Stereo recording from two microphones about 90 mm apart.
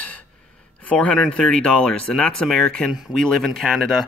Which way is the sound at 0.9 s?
10° left (ahead or behind).